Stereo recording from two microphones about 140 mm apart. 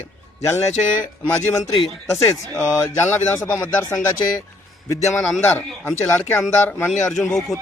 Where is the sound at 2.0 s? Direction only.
20° left (ahead or behind).